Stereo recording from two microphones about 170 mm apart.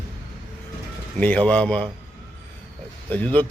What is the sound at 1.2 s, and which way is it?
Speech, 10° left (ahead or behind).